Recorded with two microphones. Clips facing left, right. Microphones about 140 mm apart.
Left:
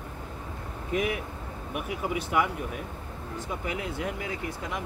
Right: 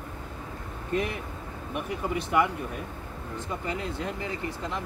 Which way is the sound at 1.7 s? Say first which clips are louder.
Right 1 dB; 5° left (ahead or behind).